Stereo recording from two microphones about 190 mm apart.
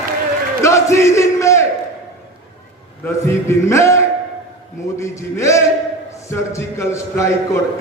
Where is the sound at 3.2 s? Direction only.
15° left (ahead or behind).